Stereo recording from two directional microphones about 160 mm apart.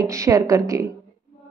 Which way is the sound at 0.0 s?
20° right (ahead or behind).